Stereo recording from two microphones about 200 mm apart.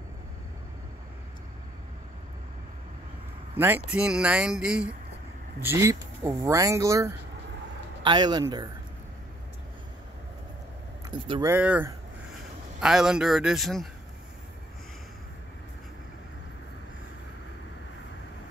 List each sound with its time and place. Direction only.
3.5 s speech: 10° right (ahead or behind)
11.1 s speech: 25° right (ahead or behind)
11.5 s speech: 10° right (ahead or behind)